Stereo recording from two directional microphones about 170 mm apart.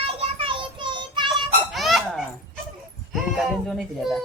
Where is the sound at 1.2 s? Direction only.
Centre (ahead or behind).